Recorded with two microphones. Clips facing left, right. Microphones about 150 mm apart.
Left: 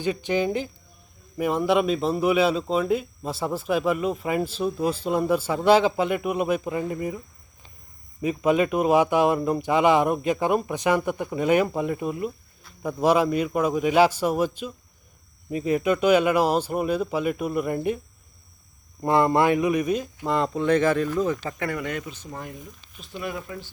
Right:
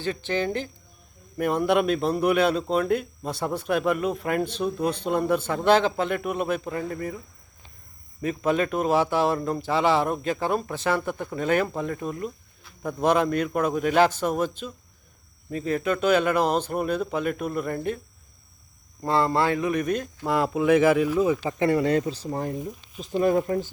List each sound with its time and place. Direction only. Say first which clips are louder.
0.0 s speech: left 3 dB; 15° left (ahead or behind)
8.2 s speech: left 3 dB; 10° left (ahead or behind)
19.0 s speech: left 3 dB; 20° left (ahead or behind); by 21.5 s 10° right (ahead or behind)
21.6 s speech: right 8 dB; 30° right (ahead or behind); by 23.7 s 45° right (ahead or behind)